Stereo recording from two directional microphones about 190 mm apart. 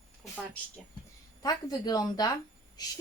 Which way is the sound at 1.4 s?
20° left (ahead or behind).